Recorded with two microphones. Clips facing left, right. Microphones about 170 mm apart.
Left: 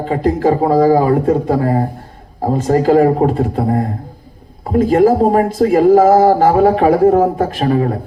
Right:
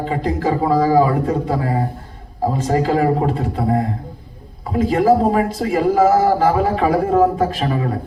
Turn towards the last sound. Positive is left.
turn(degrees=50)  # may be behind; listen again after turning